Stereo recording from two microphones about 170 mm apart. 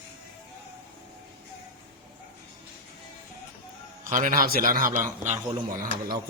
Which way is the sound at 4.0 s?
50° right (ahead or behind).